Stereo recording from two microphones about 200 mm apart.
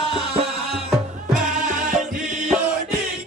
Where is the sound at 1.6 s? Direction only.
40° right (ahead or behind).